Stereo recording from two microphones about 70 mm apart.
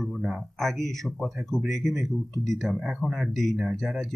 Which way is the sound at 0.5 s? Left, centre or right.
Centre.